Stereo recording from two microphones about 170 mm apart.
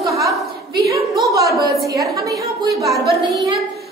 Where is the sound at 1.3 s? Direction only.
20° right (ahead or behind).